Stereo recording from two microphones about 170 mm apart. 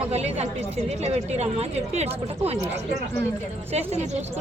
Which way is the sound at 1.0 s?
40° right (ahead or behind).